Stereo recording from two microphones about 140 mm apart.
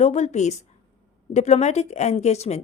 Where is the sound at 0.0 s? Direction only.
55° left (ahead or behind).